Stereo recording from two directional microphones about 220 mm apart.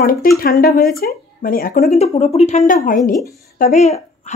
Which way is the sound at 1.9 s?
30° left (ahead or behind).